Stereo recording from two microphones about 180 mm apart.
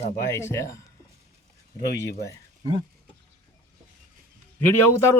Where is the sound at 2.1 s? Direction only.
15° left (ahead or behind).